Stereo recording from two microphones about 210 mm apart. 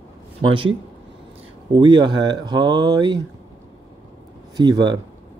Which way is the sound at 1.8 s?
20° right (ahead or behind).